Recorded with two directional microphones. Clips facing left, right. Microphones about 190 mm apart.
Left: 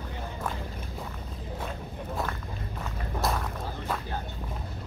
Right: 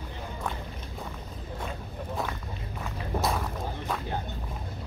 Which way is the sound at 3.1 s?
Centre (ahead or behind).